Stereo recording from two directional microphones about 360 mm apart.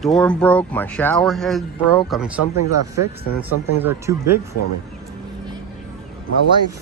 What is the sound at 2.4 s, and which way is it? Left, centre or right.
Speech, right.